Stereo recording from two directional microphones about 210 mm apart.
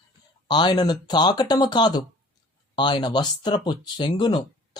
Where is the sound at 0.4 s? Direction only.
20° left (ahead or behind).